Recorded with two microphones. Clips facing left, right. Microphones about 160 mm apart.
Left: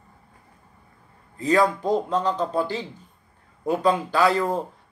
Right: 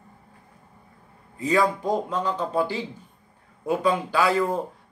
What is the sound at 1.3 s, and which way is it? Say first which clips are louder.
A man's voice: left 2 dB; 10° right (ahead or behind).